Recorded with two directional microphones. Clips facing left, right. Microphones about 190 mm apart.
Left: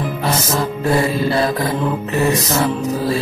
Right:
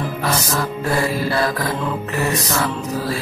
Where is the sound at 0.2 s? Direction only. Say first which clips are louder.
Left 2 dB; 25° left (ahead or behind).